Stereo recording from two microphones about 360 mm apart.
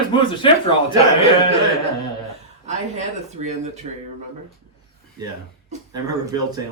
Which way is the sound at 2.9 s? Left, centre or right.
Centre.